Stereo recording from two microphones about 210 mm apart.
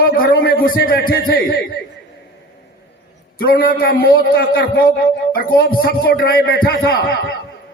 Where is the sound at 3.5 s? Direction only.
45° left (ahead or behind).